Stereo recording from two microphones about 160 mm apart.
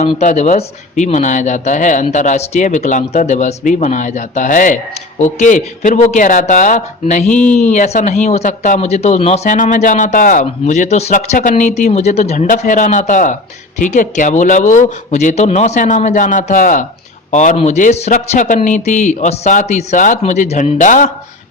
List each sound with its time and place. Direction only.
0.2 s speech: 50° left (ahead or behind)